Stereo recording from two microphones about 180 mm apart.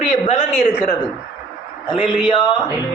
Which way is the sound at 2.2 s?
25° left (ahead or behind).